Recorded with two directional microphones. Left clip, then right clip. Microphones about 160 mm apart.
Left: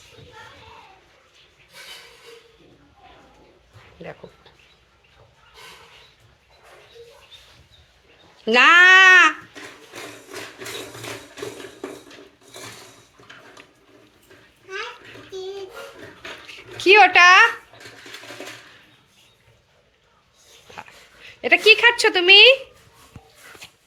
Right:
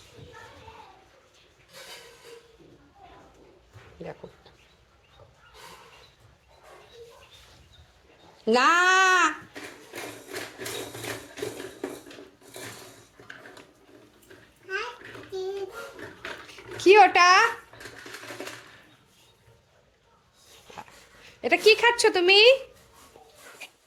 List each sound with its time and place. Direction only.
8.4 s babbling: 5° right (ahead or behind)
16.5 s a sound: 25° right (ahead or behind)
21.2 s speech: 15° right (ahead or behind)